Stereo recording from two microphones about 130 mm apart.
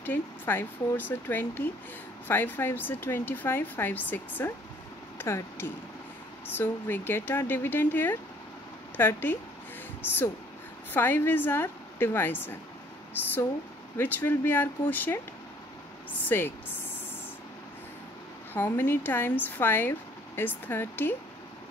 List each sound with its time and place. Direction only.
0.0 s speech: 15° left (ahead or behind)
10.9 s speech: 15° left (ahead or behind)
13.9 s speech: 15° left (ahead or behind)
16.3 s speech: 15° left (ahead or behind)
18.5 s speech: 15° left (ahead or behind)